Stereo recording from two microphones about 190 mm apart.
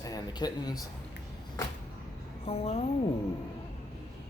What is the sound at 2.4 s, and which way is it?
Speech, 35° left (ahead or behind).